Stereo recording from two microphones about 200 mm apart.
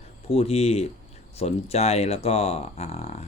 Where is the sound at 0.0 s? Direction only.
30° left (ahead or behind).